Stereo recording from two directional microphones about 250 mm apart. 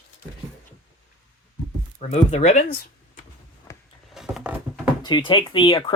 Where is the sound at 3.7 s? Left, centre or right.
Centre.